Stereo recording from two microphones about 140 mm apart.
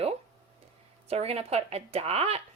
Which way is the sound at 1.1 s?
45° right (ahead or behind).